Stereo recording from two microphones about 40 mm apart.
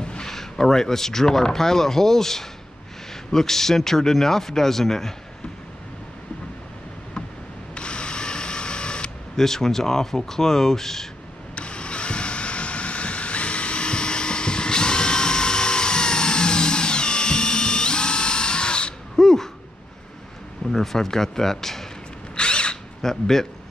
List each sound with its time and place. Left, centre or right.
0.0 s a sound: left
0.3 s speech: centre
7.7 s camera: left
9.4 s speech: centre
11.5 s vehicle: left
19.1 s a sound: centre
20.7 s speech: centre
22.3 s drill: left
23.0 s speech: centre